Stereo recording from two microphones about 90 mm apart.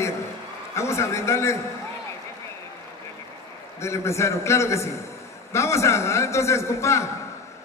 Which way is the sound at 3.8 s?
30° left (ahead or behind).